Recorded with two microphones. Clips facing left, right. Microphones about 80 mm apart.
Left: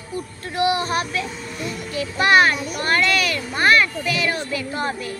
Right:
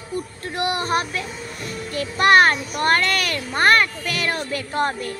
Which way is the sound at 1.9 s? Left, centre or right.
Right.